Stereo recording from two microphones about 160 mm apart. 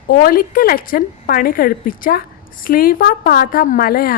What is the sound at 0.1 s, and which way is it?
A woman's voice, 65° left (ahead or behind).